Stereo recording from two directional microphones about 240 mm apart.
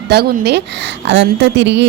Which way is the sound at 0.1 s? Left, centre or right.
Right.